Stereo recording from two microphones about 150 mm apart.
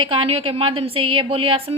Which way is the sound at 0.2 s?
40° right (ahead or behind).